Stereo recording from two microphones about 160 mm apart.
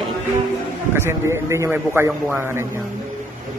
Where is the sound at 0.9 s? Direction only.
15° right (ahead or behind).